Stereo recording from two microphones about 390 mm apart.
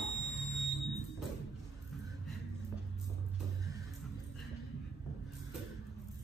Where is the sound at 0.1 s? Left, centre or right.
Left.